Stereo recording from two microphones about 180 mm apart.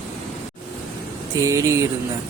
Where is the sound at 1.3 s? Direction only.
15° right (ahead or behind).